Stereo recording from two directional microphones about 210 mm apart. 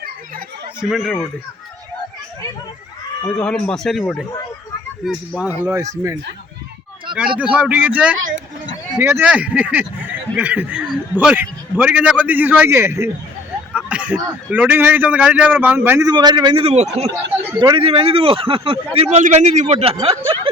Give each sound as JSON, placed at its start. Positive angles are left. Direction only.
{"t": 0.8, "sound": "speech", "side_deg": 0}
{"t": 3.2, "sound": "speech", "side_deg": 5}
{"t": 5.6, "sound": "speech", "side_deg": -15}
{"t": 7.1, "sound": "speech", "side_deg": -5}